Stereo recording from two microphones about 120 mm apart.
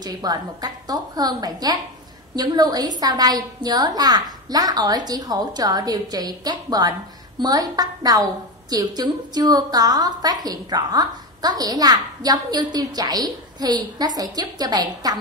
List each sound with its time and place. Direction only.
0.0 s a woman's voice: 35° right (ahead or behind)